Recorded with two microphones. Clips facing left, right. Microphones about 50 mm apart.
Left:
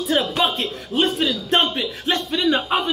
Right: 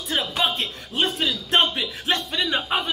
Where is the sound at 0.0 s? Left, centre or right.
Centre.